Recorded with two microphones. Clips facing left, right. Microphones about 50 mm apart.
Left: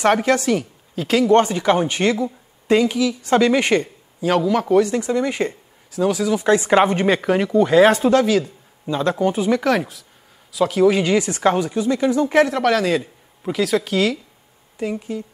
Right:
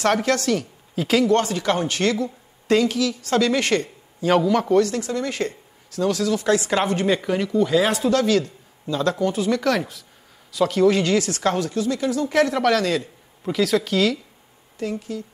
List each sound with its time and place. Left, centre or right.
0.0 s speech: centre
0.9 s a man's voice: centre
1.3 s speech: left
4.2 s a man's voice: centre
4.8 s speech: left
7.1 s speech: left
8.2 s speech: centre
8.8 s speech: left
12.4 s speech: centre
14.8 s speech: centre